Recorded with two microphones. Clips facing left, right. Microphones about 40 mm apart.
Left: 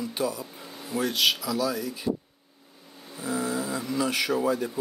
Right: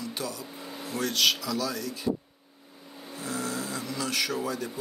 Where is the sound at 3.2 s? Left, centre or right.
Centre.